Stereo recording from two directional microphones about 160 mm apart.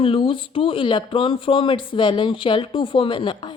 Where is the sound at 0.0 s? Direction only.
35° left (ahead or behind).